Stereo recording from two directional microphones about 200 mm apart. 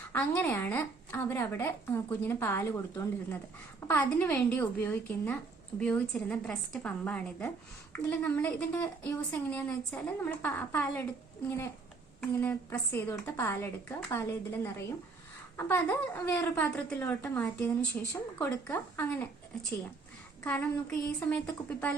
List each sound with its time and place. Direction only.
0.1 s a woman's voice: 10° left (ahead or behind)
20.4 s a woman's voice: 5° left (ahead or behind)